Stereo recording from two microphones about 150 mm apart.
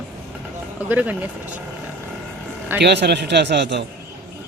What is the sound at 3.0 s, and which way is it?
Speech, 90° right.